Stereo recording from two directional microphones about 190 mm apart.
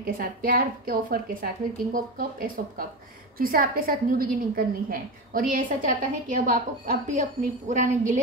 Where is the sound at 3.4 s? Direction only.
50° right (ahead or behind).